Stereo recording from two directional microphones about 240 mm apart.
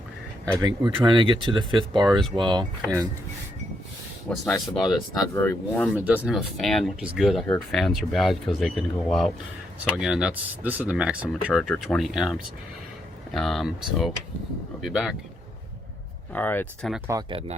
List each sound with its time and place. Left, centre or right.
0.6 s speech: centre
2.0 s speech: centre
2.3 s speech: centre
4.3 s speech: centre
5.3 s speech: centre
5.9 s speech: centre
16.3 s speech: centre
17.1 s speech: centre